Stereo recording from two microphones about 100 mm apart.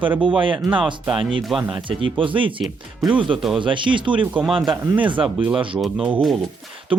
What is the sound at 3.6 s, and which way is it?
Speech, 55° right (ahead or behind).